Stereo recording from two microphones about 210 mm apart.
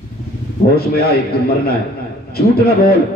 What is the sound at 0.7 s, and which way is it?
Speech, 50° left (ahead or behind).